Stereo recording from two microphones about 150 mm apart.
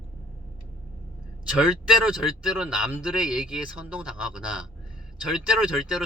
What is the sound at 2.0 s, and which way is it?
Speech, 5° right (ahead or behind).